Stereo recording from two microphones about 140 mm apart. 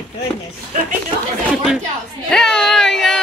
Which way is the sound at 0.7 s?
65° right (ahead or behind).